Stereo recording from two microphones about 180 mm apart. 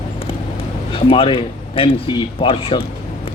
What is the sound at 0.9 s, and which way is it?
Speech, 30° left (ahead or behind).